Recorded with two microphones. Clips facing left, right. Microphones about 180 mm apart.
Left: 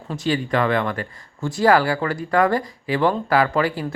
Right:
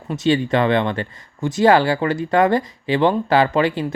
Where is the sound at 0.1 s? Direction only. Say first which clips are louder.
Right 4 dB; 20° right (ahead or behind).